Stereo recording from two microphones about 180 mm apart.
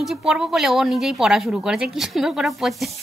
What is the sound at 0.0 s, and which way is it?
Speech, 5° right (ahead or behind).